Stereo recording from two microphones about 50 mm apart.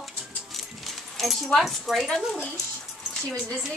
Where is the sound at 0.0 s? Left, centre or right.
Centre.